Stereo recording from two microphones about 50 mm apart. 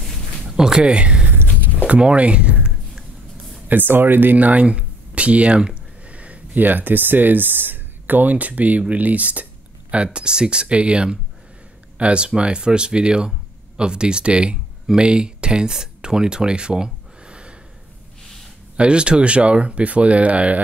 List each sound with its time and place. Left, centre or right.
0.5 s a sound: centre
1.9 s speech: right
3.6 s speech: right
18.8 s speech: right